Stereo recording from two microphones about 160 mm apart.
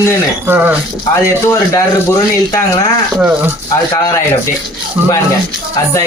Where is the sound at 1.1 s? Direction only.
20° left (ahead or behind).